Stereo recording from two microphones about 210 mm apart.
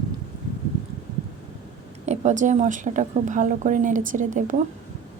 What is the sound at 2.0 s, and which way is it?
A woman's voice, 35° right (ahead or behind).